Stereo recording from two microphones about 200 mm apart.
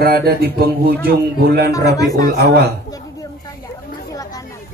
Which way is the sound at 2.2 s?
50° right (ahead or behind).